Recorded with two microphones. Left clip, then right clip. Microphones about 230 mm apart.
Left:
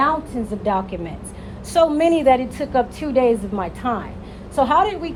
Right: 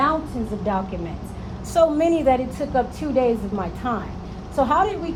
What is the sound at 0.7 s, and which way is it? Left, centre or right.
A woman's voice, left.